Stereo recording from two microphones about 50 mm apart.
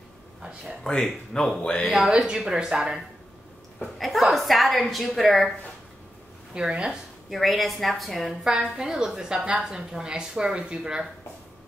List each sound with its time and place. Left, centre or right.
0.8 s speech: centre
1.6 s speech: left
2.0 s a woman's voice: centre
3.8 s a woman's voice: centre
6.5 s a woman's voice: centre
7.2 s a woman's voice: centre
8.5 s a woman's voice: centre